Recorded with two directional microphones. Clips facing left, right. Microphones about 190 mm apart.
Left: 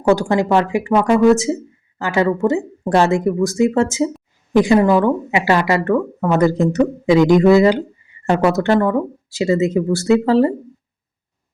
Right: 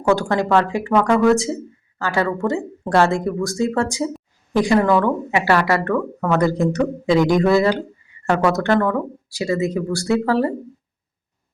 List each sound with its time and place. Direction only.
0.1 s a woman's voice: 15° left (ahead or behind)